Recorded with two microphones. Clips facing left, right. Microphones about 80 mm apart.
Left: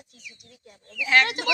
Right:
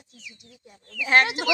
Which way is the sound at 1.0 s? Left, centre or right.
Right.